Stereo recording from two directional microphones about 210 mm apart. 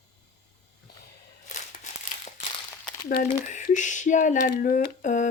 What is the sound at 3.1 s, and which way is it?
Speech, 40° left (ahead or behind).